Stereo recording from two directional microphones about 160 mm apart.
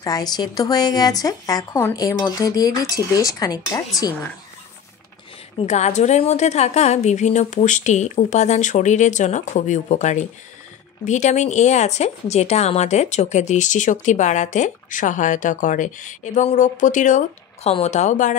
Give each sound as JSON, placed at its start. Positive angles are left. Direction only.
{"t": 0.0, "sound": "speech", "side_deg": 25}
{"t": 5.6, "sound": "a woman's voice", "side_deg": 45}